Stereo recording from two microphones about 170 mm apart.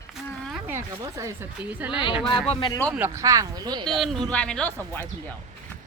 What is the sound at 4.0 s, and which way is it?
Speech, 5° left (ahead or behind).